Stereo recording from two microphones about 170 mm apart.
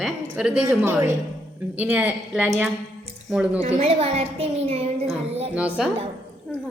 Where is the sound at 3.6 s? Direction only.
35° right (ahead or behind).